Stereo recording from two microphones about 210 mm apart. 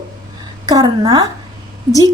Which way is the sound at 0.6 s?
15° right (ahead or behind).